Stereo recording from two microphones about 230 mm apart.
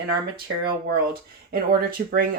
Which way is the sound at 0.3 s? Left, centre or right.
Right.